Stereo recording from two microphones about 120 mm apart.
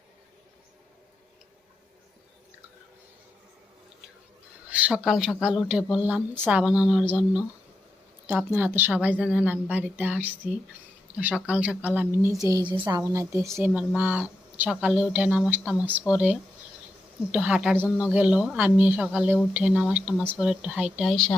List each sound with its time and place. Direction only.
4.7 s speech: 10° right (ahead or behind)
8.5 s speech: 15° right (ahead or behind)
12.5 s a woman's voice: 30° right (ahead or behind)
13.0 s a woman's voice: 25° right (ahead or behind)
13.6 s speech: 10° right (ahead or behind)